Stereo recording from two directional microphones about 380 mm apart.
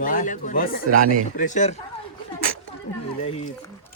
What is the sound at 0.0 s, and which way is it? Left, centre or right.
Speech, left.